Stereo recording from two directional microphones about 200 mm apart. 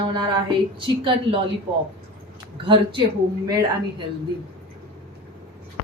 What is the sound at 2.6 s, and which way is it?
Speech, 25° right (ahead or behind).